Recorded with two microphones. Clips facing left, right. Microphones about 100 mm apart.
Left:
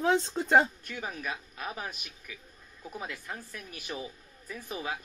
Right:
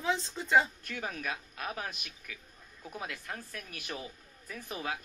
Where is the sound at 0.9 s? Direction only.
20° left (ahead or behind).